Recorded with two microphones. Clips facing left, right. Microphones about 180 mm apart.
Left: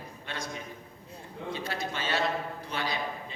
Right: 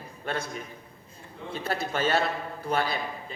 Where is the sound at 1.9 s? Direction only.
50° right (ahead or behind).